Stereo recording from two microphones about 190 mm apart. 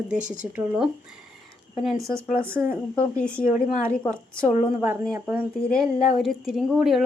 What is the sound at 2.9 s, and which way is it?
Speech, 5° left (ahead or behind).